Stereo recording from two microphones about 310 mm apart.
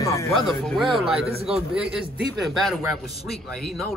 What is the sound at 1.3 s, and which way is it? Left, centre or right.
Speech, centre.